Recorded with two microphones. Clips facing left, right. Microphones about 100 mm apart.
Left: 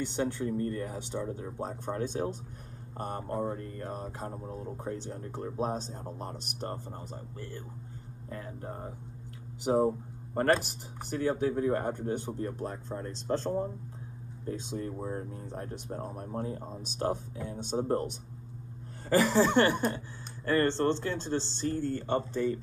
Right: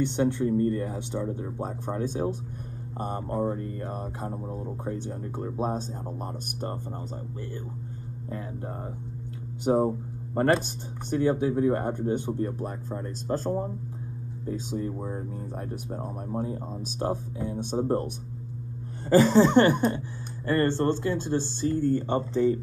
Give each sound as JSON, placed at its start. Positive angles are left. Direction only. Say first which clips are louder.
{"t": 0.0, "sound": "speech", "louder": "right 7 dB", "side_deg": -20}
{"t": 6.9, "sound": "speech", "louder": "right 6 dB", "side_deg": -25}
{"t": 19.0, "sound": "speech", "louder": "right 6 dB", "side_deg": -20}